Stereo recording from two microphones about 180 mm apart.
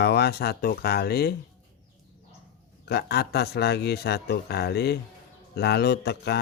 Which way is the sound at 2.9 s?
65° left (ahead or behind).